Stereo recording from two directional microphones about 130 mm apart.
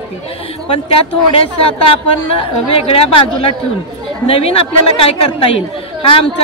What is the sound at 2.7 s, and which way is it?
A woman's voice, 45° left (ahead or behind).